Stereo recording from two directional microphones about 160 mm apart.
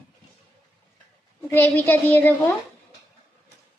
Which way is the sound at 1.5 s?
15° left (ahead or behind).